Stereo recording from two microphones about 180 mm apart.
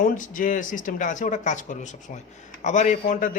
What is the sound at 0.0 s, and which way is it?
Speech, 45° left (ahead or behind).